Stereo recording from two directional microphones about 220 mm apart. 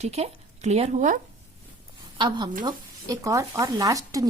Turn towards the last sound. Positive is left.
turn(degrees=-15)  # may be behind; listen again after turning